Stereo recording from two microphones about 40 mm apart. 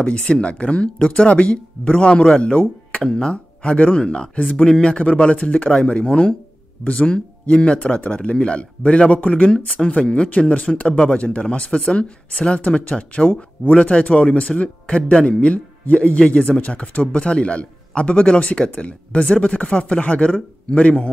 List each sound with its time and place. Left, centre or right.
0.0 s speech: left
10.5 s speech: left